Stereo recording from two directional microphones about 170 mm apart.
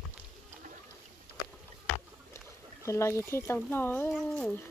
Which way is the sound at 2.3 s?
15° left (ahead or behind).